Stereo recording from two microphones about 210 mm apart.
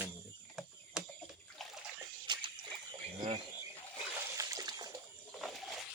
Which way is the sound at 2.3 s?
20° right (ahead or behind).